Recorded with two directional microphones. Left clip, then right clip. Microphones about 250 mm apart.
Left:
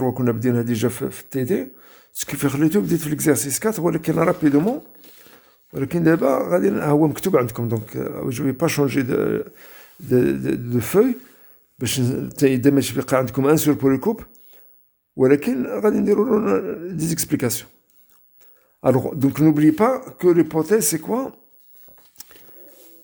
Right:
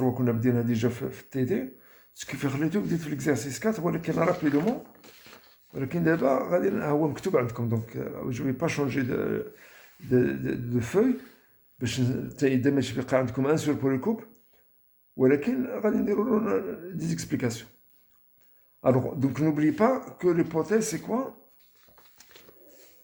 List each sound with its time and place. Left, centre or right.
0.0 s speech: left
5.7 s speech: left
18.8 s speech: left
22.2 s a sound: left